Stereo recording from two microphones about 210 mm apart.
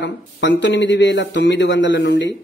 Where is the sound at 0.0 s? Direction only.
60° left (ahead or behind).